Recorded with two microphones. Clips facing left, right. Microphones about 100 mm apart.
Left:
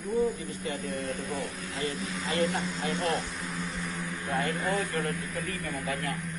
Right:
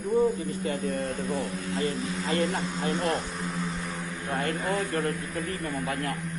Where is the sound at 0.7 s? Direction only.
40° right (ahead or behind).